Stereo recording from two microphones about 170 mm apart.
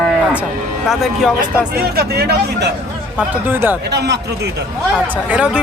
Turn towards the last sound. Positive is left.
turn(degrees=-5)  # may be behind; listen again after turning